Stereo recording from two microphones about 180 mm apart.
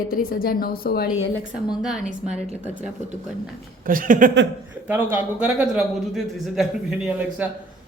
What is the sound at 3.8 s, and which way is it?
Speech, 50° right (ahead or behind).